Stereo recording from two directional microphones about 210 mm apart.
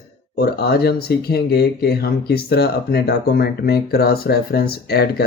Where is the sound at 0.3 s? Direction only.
50° left (ahead or behind).